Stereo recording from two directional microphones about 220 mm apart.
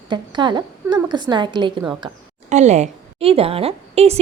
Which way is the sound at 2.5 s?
30° right (ahead or behind).